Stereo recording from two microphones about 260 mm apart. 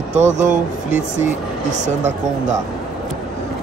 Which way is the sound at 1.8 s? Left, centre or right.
Right.